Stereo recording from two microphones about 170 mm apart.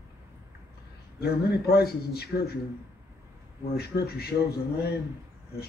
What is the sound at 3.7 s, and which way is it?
Speech, 70° left (ahead or behind).